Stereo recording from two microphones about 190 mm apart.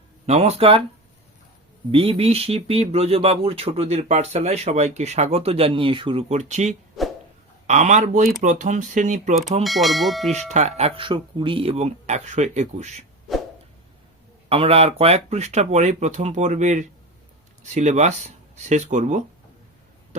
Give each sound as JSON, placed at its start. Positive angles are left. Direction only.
{"t": 0.3, "sound": "speech", "side_deg": -35}
{"t": 1.9, "sound": "speech", "side_deg": -30}
{"t": 7.0, "sound": "a sound", "side_deg": 0}
{"t": 7.7, "sound": "speech", "side_deg": -40}
{"t": 9.6, "sound": "speech", "side_deg": 0}
{"t": 10.5, "sound": "speech", "side_deg": -35}
{"t": 14.5, "sound": "speech", "side_deg": -30}